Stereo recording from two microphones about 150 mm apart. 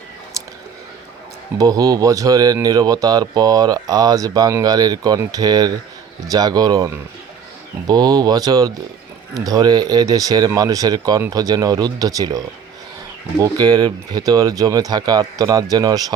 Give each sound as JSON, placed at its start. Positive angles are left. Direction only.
{"t": 0.4, "sound": "a sound", "side_deg": -20}
{"t": 1.5, "sound": "speech", "side_deg": -25}
{"t": 13.4, "sound": "speech", "side_deg": -25}